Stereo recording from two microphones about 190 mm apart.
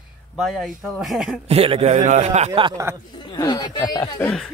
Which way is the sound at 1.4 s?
30° right (ahead or behind).